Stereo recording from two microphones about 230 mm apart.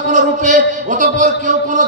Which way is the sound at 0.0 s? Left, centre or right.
Right.